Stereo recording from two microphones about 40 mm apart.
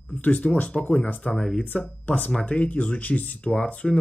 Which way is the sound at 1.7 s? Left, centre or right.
Left.